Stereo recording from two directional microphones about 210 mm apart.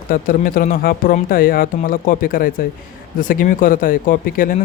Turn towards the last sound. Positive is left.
turn(degrees=40)  # may be behind; listen again after turning